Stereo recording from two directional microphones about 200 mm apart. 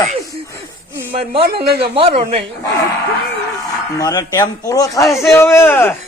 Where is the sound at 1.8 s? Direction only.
30° right (ahead or behind).